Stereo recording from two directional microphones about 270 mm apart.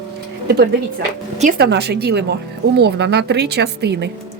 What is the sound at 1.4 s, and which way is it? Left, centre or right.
Speech, right.